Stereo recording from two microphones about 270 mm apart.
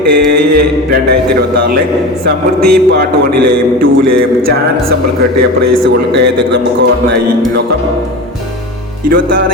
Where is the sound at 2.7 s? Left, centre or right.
Right.